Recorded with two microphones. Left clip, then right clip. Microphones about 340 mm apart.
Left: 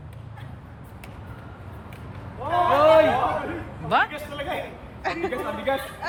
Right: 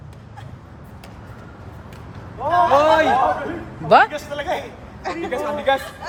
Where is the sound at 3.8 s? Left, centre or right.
Centre.